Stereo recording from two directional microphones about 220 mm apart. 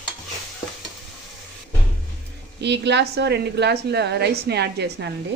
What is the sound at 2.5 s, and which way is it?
A woman's voice, 50° right (ahead or behind).